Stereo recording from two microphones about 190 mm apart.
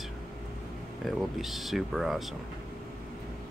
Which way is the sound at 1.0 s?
Centre (ahead or behind).